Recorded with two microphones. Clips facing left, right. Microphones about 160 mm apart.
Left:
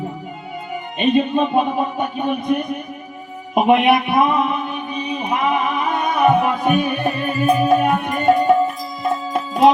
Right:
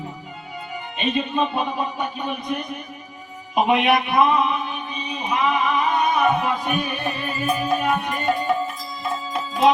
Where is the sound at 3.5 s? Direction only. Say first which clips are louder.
Left 4 dB; 55° left (ahead or behind).